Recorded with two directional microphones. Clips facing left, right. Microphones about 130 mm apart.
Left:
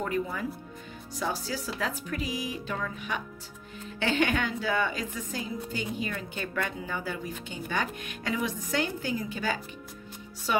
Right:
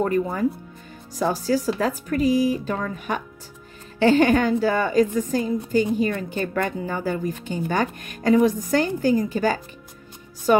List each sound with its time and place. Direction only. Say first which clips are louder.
0.0 s a woman's voice: right 9 dB; 45° right (ahead or behind)